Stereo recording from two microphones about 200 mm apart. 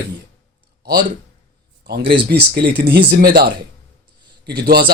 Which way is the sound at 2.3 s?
50° right (ahead or behind).